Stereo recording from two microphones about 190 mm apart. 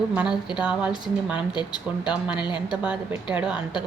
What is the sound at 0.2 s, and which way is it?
A woman's voice, 5° right (ahead or behind).